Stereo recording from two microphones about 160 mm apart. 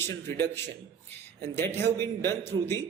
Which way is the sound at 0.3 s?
15° left (ahead or behind).